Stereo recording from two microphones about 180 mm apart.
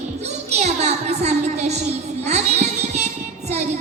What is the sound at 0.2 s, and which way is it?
Music, 40° right (ahead or behind).